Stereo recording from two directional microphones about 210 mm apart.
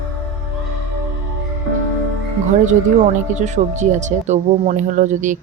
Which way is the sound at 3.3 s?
35° right (ahead or behind).